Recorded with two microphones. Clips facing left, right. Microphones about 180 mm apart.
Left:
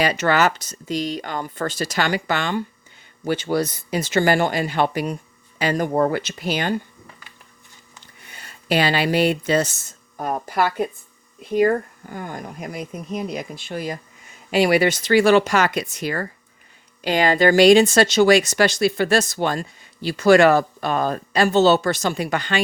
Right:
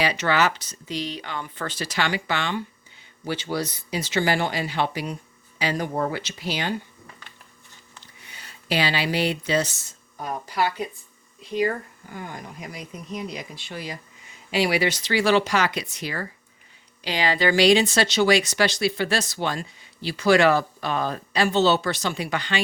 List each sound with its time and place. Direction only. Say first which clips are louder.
0.0 s speech: left 4 dB; 45° left (ahead or behind)
8.0 s speech: left 5 dB; 50° left (ahead or behind)